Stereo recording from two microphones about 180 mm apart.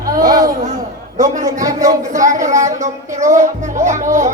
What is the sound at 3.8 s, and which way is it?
Speech, 45° right (ahead or behind).